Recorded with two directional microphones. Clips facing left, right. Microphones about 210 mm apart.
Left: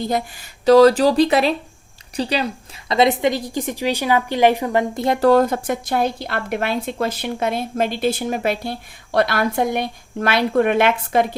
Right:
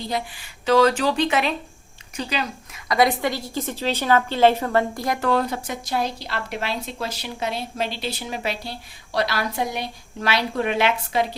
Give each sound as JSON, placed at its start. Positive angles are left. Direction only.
{"t": 0.0, "sound": "a woman's voice", "side_deg": 45}
{"t": 5.3, "sound": "a woman's voice", "side_deg": 45}